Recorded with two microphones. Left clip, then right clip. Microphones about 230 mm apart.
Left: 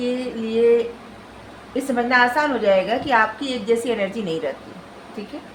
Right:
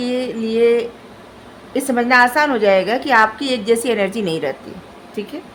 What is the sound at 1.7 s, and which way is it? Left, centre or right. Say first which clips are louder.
A woman's voice: right 4 dB; right.